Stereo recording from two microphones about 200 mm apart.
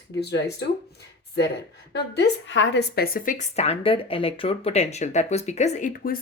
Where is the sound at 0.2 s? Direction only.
55° left (ahead or behind).